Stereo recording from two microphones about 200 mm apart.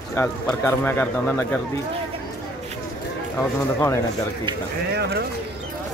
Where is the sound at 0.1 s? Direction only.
10° left (ahead or behind).